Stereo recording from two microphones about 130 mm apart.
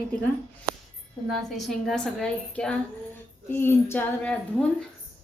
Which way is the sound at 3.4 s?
15° left (ahead or behind).